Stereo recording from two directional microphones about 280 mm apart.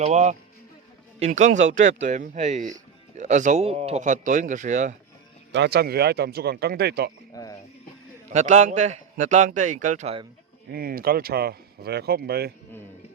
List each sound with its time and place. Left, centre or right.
0.0 s a man's voice: right
5.5 s speech: right
7.3 s speech: centre
8.3 s a man's voice: right